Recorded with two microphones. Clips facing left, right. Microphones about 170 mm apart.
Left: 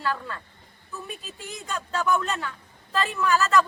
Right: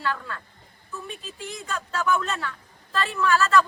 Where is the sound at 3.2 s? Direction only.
15° left (ahead or behind).